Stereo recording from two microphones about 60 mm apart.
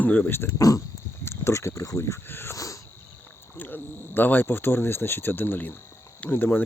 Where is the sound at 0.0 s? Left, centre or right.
Left.